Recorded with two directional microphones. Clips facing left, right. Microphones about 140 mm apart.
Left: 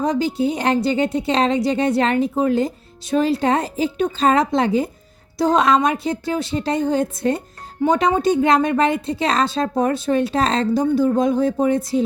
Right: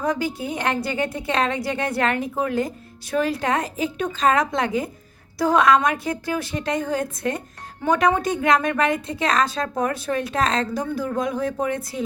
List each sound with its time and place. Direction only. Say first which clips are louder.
0.0 s a woman's voice: left 5 dB; 25° left (ahead or behind)